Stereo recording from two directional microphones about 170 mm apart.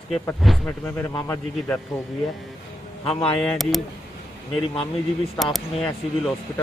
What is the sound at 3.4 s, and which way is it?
Bell, centre (ahead or behind).